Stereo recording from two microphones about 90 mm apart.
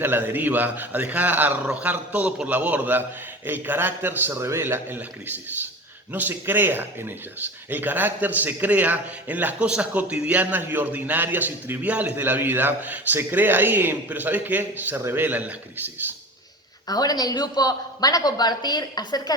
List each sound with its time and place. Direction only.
0.0 s a man's voice: 20° right (ahead or behind)
6.1 s a man's voice: 20° right (ahead or behind)
16.9 s a woman's voice: 45° left (ahead or behind)